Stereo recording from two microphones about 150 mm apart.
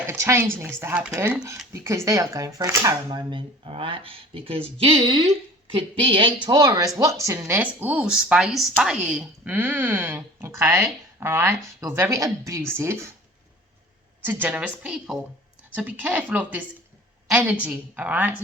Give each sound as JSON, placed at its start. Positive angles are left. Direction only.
{"t": 0.1, "sound": "speech", "side_deg": -15}
{"t": 14.3, "sound": "speech", "side_deg": -10}